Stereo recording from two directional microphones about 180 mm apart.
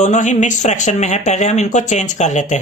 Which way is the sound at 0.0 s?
40° left (ahead or behind).